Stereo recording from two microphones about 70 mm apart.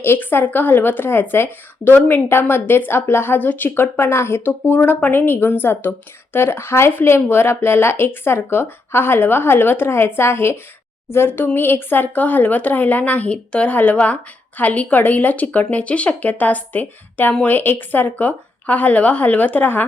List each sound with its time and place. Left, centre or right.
0.0 s speech: left